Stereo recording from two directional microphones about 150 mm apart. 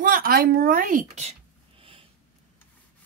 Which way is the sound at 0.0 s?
75° right (ahead or behind).